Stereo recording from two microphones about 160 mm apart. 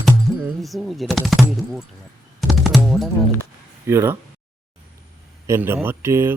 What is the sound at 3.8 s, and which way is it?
Speech, 15° right (ahead or behind).